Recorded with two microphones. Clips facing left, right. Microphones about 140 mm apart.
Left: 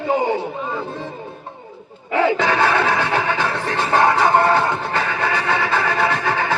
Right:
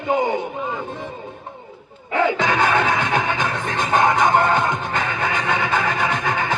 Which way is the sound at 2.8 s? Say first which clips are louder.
Left 1 dB; 35° left (ahead or behind).